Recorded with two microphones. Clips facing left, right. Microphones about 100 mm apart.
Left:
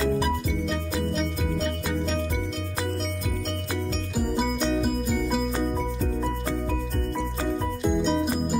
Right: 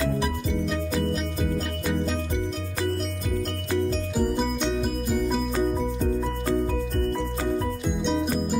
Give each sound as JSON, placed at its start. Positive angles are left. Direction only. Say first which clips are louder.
{"t": 4.6, "sound": "music", "louder": "left 1 dB", "side_deg": 0}
{"t": 7.8, "sound": "music", "louder": "left 2 dB", "side_deg": 5}